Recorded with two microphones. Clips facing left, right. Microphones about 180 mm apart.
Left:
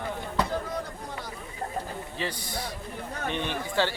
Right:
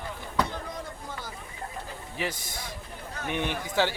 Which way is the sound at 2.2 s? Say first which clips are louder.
Even; 10° right (ahead or behind).